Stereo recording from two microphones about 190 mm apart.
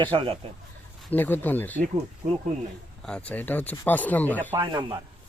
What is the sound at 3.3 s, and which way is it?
Speech, 10° left (ahead or behind).